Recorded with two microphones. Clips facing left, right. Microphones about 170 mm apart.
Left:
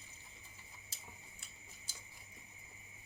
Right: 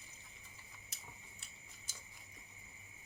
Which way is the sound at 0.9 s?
30° left (ahead or behind).